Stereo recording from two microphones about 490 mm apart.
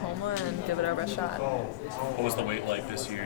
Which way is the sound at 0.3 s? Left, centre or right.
Right.